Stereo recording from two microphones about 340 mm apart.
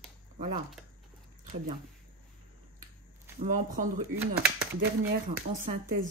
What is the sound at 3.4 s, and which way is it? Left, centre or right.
Speech, right.